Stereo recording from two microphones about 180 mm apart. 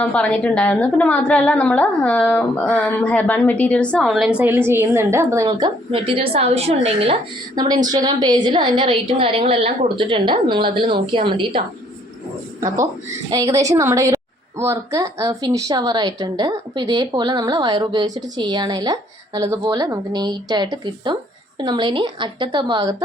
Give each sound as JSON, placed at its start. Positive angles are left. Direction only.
{"t": 0.0, "sound": "a woman's voice", "side_deg": 5}